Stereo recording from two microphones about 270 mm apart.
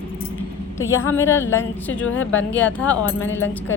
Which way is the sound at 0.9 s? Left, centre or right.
Centre.